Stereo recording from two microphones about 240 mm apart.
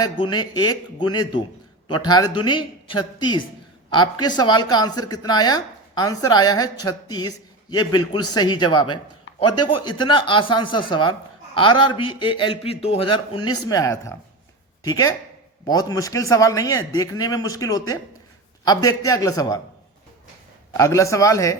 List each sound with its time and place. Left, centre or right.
0.0 s a man's voice: centre
9.5 s a man's voice: left
9.8 s a man's voice: centre
20.7 s speech: centre